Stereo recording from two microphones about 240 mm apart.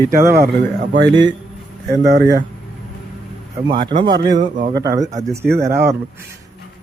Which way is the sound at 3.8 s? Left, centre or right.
Centre.